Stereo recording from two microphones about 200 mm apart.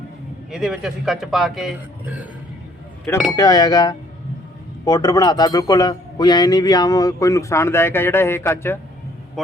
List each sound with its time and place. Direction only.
0.5 s a man's voice: centre (ahead or behind)
3.3 s a man's voice: 20° left (ahead or behind)